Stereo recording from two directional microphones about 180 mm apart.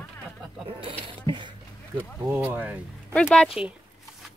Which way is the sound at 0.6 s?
30° right (ahead or behind).